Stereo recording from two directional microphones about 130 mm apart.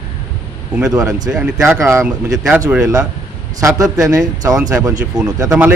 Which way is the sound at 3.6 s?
25° right (ahead or behind).